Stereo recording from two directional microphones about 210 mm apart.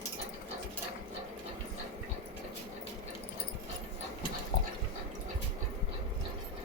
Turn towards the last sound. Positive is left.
turn(degrees=45)  # may be behind; listen again after turning